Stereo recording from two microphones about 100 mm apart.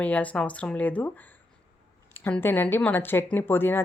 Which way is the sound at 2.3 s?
20° left (ahead or behind).